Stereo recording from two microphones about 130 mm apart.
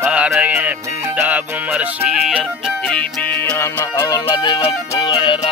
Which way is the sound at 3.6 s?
25° left (ahead or behind).